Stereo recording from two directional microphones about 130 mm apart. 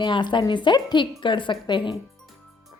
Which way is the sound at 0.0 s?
35° left (ahead or behind).